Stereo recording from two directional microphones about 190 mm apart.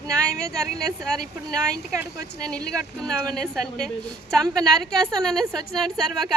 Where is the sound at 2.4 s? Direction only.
5° left (ahead or behind).